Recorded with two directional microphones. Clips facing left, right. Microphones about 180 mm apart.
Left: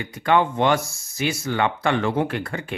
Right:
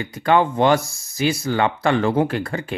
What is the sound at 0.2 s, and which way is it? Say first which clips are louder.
Speech: right 2 dB; 35° right (ahead or behind).